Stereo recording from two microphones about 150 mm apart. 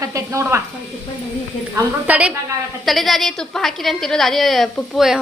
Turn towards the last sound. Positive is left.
turn(degrees=-5)  # may be behind; listen again after turning